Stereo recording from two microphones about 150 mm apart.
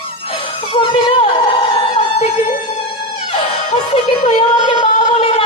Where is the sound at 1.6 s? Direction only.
35° left (ahead or behind).